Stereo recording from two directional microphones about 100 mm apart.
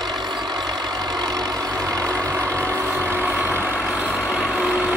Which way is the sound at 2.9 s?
20° right (ahead or behind).